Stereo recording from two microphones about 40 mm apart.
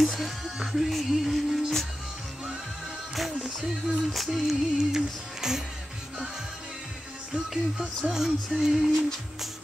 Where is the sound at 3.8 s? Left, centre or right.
Centre.